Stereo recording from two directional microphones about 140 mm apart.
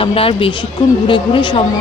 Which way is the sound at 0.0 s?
40° left (ahead or behind).